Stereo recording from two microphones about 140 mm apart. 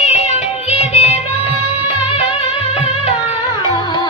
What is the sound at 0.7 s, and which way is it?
Music, 45° left (ahead or behind).